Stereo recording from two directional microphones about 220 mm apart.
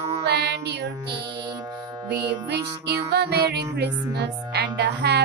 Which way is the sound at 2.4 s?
50° right (ahead or behind).